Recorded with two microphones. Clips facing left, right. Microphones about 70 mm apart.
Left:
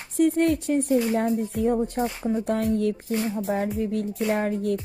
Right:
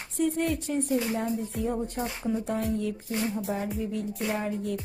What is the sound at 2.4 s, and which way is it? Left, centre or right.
Speech, left.